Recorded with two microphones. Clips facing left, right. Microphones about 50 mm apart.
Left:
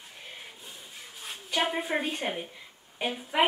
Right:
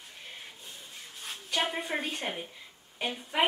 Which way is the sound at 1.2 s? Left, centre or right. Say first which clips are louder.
Left 2 dB; centre.